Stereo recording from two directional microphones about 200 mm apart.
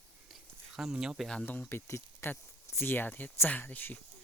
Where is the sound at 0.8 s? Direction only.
5° right (ahead or behind).